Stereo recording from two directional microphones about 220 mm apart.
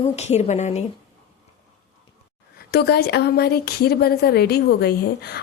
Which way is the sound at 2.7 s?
45° left (ahead or behind).